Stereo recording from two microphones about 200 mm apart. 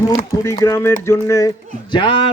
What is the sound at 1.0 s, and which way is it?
Speech, 15° left (ahead or behind).